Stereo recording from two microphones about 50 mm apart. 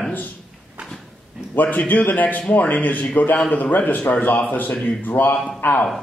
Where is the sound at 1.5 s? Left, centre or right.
Left.